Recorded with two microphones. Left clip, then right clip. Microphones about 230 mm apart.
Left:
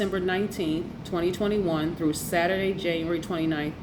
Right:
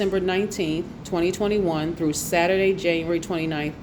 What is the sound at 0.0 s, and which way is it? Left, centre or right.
A woman's voice, right.